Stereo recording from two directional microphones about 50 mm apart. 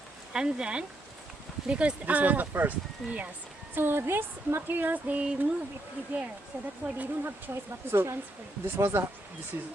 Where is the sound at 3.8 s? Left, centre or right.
Right.